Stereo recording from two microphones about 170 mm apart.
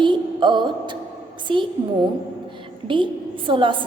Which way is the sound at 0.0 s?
30° right (ahead or behind).